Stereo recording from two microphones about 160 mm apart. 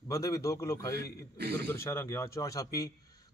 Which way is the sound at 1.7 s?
15° left (ahead or behind).